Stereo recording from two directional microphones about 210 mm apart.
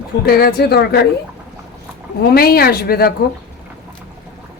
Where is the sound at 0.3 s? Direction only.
45° left (ahead or behind).